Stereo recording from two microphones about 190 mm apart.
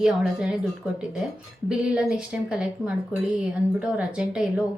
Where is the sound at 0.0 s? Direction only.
5° right (ahead or behind).